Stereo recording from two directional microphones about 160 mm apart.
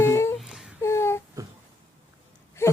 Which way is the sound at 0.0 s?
15° left (ahead or behind).